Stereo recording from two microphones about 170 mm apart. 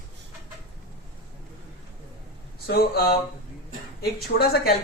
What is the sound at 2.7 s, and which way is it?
Speech, 65° left (ahead or behind).